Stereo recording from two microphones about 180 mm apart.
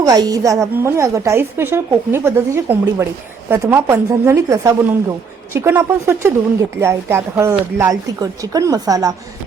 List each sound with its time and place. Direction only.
0.0 s a woman's voice: 20° right (ahead or behind)